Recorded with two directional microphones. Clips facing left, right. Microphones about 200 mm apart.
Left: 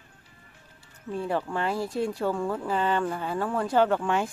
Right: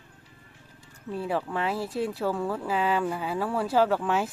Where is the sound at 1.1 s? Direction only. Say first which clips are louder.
Left 1 dB; 5° right (ahead or behind).